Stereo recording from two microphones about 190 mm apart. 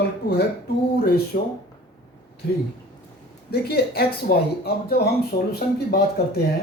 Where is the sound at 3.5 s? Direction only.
55° left (ahead or behind).